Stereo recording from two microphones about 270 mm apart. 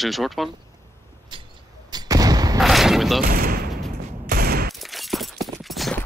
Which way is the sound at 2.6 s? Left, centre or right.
Centre.